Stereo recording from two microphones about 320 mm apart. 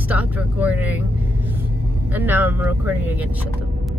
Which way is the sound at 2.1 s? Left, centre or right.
Centre.